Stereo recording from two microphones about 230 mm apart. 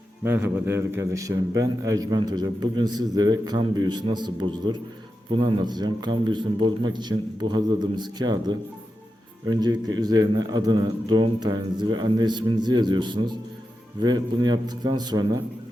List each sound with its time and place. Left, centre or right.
0.3 s a man's voice: centre